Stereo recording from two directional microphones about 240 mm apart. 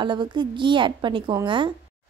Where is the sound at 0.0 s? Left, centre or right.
Centre.